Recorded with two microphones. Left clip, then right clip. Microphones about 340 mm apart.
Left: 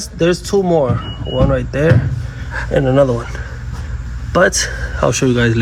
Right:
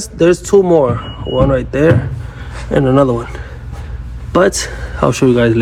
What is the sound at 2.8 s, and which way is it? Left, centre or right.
Speech, right.